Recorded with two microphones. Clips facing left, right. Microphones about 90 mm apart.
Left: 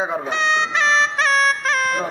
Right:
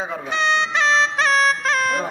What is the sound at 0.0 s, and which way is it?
Speech, 20° left (ahead or behind).